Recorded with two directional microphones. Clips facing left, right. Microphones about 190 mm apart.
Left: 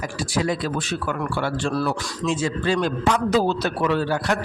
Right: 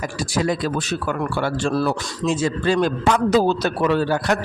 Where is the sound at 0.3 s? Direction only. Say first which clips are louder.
Right 2 dB; 40° right (ahead or behind).